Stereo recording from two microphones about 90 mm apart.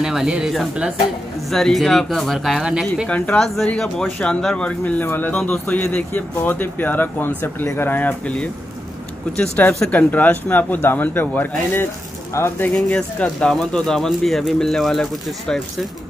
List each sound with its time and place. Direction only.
0.0 s speech: 5° right (ahead or behind)
3.1 s speech: 10° left (ahead or behind)
5.3 s speech: 5° left (ahead or behind)
5.7 s speech: 20° left (ahead or behind)
9.8 s speech: 15° left (ahead or behind)
12.9 s speech: 10° left (ahead or behind)